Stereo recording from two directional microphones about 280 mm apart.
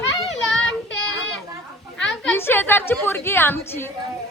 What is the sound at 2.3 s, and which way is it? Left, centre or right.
A woman's voice, centre.